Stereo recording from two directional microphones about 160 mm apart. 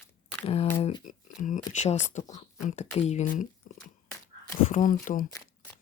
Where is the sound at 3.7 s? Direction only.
55° left (ahead or behind).